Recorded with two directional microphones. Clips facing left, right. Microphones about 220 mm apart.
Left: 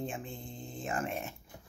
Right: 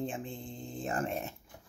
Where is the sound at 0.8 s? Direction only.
35° right (ahead or behind).